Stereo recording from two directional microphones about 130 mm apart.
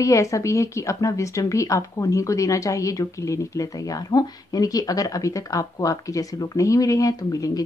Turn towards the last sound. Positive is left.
turn(degrees=30)  # may be behind; listen again after turning